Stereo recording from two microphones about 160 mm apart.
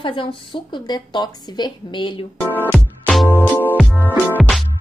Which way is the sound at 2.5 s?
10° left (ahead or behind).